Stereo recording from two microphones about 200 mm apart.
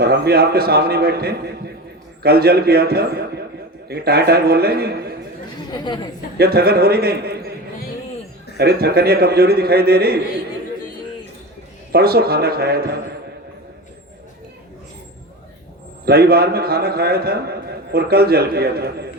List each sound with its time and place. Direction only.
0.0 s a man's voice: 55° right (ahead or behind)
5.7 s a woman's voice: 20° left (ahead or behind)
6.3 s a man's voice: 50° right (ahead or behind)
8.5 s a man's voice: 50° right (ahead or behind)
11.9 s a man's voice: 50° right (ahead or behind)
16.0 s a man's voice: 50° right (ahead or behind)